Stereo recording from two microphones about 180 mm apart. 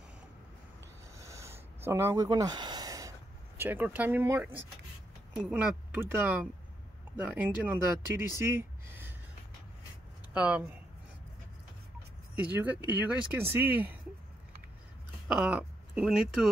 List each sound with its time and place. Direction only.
1.1 s a sound: 15° right (ahead or behind)
3.5 s speech: 10° right (ahead or behind)
10.3 s speech: 5° right (ahead or behind)
12.5 s speech: 10° right (ahead or behind)
15.2 s speech: 5° right (ahead or behind)